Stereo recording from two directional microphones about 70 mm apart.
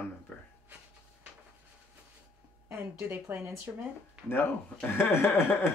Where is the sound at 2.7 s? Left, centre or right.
Right.